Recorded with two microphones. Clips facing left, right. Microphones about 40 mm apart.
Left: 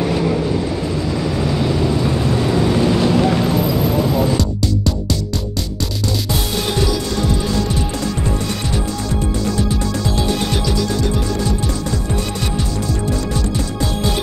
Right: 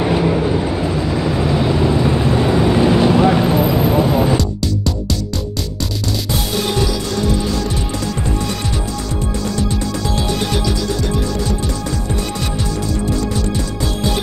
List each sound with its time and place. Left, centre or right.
0.0 s vehicle: right
4.4 s music: centre
10.1 s music: centre